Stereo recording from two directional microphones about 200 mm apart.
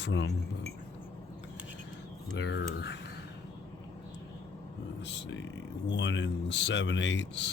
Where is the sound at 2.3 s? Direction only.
60° left (ahead or behind).